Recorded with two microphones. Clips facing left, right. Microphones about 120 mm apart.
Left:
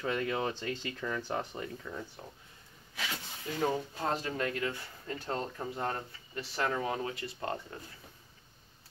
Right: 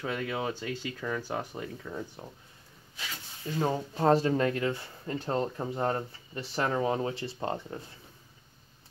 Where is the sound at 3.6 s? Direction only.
35° right (ahead or behind).